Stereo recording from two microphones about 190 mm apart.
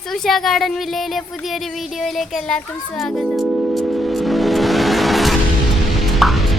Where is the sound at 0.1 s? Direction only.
Centre (ahead or behind).